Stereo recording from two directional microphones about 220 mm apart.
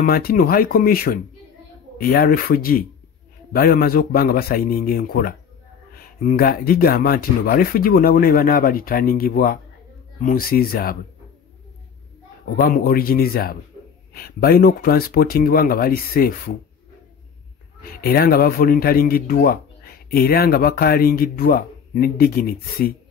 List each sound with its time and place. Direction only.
0.0 s speech: 40° left (ahead or behind)
12.5 s speech: 40° left (ahead or behind)
17.8 s speech: 45° left (ahead or behind)